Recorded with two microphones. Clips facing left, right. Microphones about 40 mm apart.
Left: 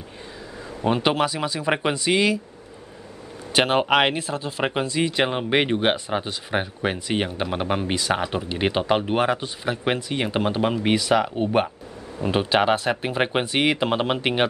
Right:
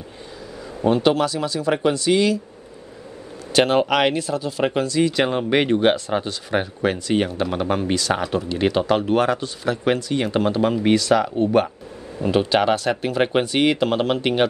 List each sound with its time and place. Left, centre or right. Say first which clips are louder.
0.8 s speech: right 3 dB; centre
1.7 s speech: right 3 dB; left
2.0 s speech: right 2 dB; centre
3.5 s speech: right 2 dB; centre